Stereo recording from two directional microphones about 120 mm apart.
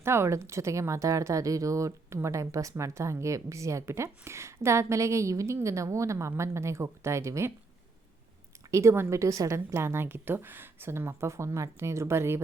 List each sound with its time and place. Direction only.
0.0 s speech: 20° right (ahead or behind)
8.7 s speech: 25° right (ahead or behind)